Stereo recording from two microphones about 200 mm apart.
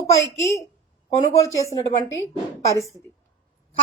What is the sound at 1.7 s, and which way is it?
Speech, 15° left (ahead or behind).